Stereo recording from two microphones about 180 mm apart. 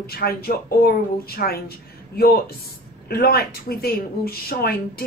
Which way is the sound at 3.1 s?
55° left (ahead or behind).